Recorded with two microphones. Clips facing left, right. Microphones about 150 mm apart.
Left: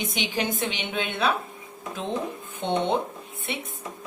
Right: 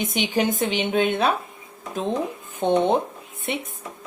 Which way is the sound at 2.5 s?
45° right (ahead or behind).